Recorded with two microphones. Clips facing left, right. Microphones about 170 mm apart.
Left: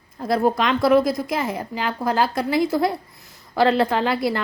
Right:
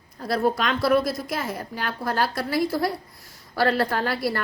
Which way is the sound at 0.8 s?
15° left (ahead or behind).